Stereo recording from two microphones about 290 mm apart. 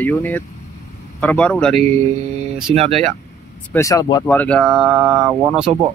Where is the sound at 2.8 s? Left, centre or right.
Right.